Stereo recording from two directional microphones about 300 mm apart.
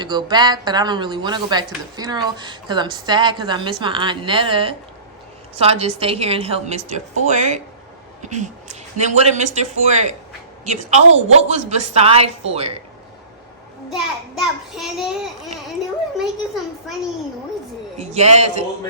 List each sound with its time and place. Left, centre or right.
0.0 s a woman's voice: centre
13.9 s a child's voice: centre
17.9 s a woman's voice: right